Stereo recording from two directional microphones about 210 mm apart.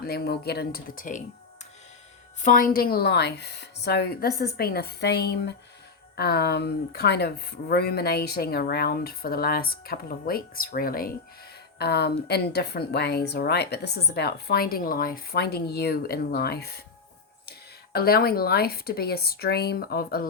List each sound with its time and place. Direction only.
0.0 s a woman's voice: 50° left (ahead or behind)
2.4 s a woman's voice: 40° left (ahead or behind)
17.9 s a woman's voice: 45° left (ahead or behind)